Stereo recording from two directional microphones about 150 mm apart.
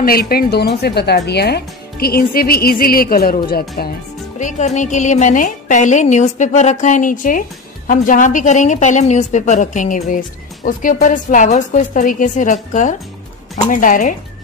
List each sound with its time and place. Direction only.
0.0 s speech: 90° left
4.4 s a woman's voice: 50° left (ahead or behind)